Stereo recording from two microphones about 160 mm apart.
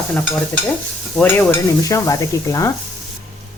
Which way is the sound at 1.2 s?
10° left (ahead or behind).